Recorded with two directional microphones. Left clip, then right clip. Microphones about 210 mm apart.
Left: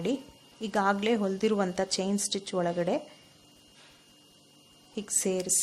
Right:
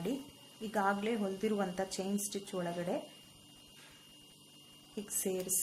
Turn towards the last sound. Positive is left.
turn(degrees=40)  # may be behind; listen again after turning